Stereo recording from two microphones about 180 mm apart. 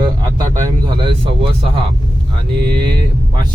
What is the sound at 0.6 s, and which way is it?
Speech, 25° right (ahead or behind).